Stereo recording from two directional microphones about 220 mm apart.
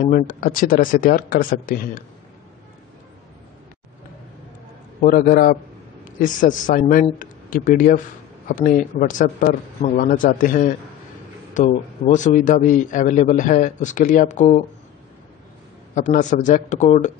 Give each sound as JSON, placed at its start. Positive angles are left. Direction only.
{"t": 0.0, "sound": "a man's voice", "side_deg": 40}
{"t": 5.0, "sound": "a man's voice", "side_deg": 40}
{"t": 15.9, "sound": "a man's voice", "side_deg": 35}